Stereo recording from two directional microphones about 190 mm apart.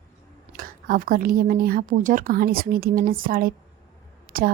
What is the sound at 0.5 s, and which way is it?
A woman's voice, 45° right (ahead or behind).